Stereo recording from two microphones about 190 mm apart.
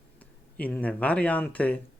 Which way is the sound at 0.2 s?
5° left (ahead or behind).